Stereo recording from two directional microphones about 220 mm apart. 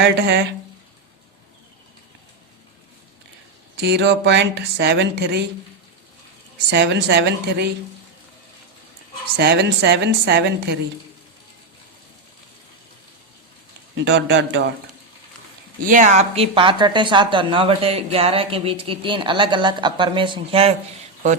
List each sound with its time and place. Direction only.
0.0 s a woman's voice: 45° right (ahead or behind)
3.8 s a woman's voice: 50° right (ahead or behind)
6.7 s a woman's voice: 50° right (ahead or behind)
9.4 s a woman's voice: 50° right (ahead or behind)
13.9 s a woman's voice: 55° right (ahead or behind)
15.8 s a woman's voice: 35° right (ahead or behind)